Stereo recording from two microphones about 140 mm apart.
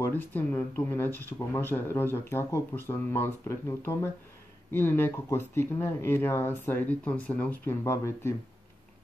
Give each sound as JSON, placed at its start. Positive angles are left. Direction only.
{"t": 0.0, "sound": "speech", "side_deg": 15}